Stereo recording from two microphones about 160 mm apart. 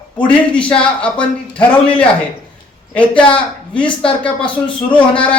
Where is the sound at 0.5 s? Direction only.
5° left (ahead or behind).